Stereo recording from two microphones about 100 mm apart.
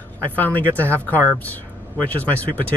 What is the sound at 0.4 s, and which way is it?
Speech, 15° left (ahead or behind).